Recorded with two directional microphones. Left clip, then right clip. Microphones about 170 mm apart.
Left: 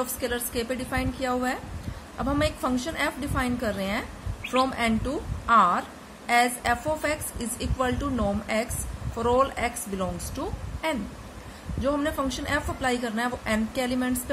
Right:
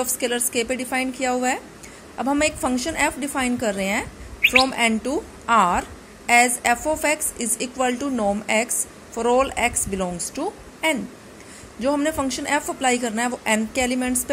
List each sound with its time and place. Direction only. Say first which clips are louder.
0.0 s a woman's voice: right 5 dB; 20° right (ahead or behind)